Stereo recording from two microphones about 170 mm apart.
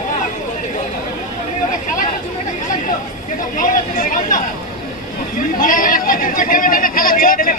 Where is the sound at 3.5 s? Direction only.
50° left (ahead or behind).